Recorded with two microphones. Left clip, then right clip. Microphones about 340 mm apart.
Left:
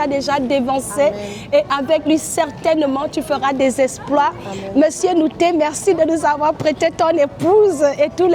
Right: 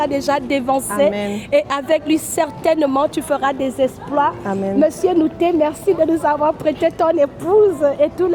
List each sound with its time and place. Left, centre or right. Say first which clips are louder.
0.0 s a woman's voice: even; centre
3.8 s a woman's voice: left 2 dB; left
7.4 s a woman's voice: left 1 dB; left